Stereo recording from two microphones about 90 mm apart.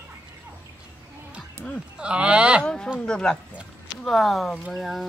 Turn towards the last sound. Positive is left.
turn(degrees=0)  # may be behind; listen again after turning